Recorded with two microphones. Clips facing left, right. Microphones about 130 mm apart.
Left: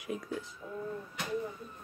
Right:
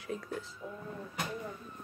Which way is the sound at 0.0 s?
15° left (ahead or behind).